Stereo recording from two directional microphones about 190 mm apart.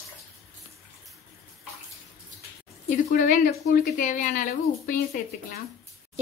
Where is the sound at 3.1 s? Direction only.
45° left (ahead or behind).